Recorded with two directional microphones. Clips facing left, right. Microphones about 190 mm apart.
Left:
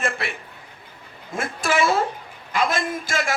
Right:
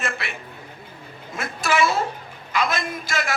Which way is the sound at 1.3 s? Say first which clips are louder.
Left 1 dB; 50° left (ahead or behind).